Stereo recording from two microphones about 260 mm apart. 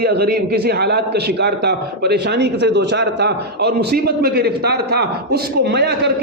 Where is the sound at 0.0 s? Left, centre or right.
Right.